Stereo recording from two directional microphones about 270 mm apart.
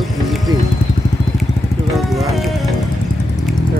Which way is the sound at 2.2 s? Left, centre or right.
Centre.